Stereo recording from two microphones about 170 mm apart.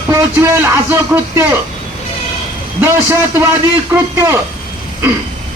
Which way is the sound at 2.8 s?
15° right (ahead or behind).